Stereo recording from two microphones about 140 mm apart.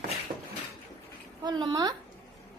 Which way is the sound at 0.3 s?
40° right (ahead or behind).